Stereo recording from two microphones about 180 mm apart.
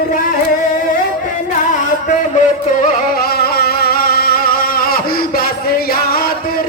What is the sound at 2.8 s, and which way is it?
Music, 55° left (ahead or behind).